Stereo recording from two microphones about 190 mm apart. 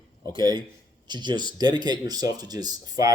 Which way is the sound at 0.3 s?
20° right (ahead or behind).